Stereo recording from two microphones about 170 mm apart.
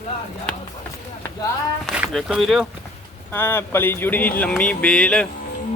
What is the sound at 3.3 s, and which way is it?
A woman's voice, 15° left (ahead or behind).